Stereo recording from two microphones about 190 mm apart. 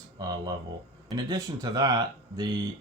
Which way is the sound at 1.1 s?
20° right (ahead or behind).